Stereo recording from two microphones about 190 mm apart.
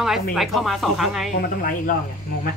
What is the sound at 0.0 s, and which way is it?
Speech, centre (ahead or behind).